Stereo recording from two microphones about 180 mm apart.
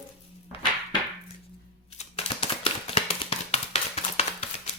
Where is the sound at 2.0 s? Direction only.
35° left (ahead or behind).